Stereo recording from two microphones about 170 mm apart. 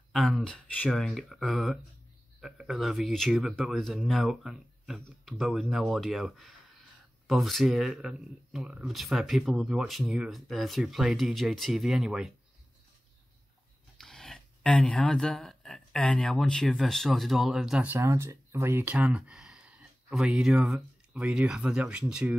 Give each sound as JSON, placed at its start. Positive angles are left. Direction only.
{"t": 0.1, "sound": "speech", "side_deg": 0}
{"t": 13.9, "sound": "speech", "side_deg": 5}